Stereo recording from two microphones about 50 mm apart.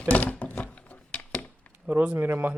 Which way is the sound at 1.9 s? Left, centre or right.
Right.